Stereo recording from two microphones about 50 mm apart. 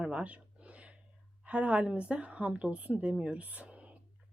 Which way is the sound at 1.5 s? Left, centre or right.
Right.